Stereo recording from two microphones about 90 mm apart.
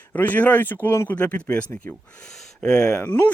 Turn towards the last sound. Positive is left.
turn(degrees=20)  # may be behind; listen again after turning